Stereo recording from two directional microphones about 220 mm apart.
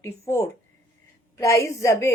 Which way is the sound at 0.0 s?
10° left (ahead or behind).